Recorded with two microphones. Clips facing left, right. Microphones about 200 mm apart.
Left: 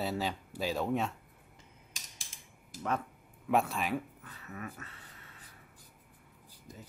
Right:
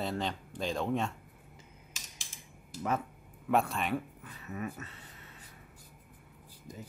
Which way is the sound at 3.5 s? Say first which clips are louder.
Even; centre (ahead or behind).